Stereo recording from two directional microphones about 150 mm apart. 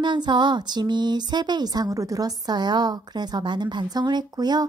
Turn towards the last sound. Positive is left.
turn(degrees=-25)  # may be behind; listen again after turning